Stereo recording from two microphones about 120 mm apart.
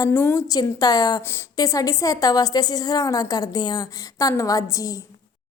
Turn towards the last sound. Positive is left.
turn(degrees=25)  # may be behind; listen again after turning